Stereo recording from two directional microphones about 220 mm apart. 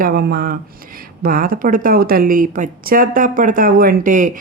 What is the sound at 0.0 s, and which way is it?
Speech, 45° right (ahead or behind).